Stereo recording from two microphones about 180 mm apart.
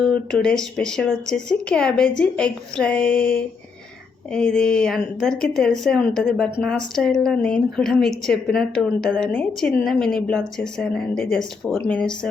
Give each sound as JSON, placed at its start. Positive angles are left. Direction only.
{"t": 0.0, "sound": "a woman's voice", "side_deg": 5}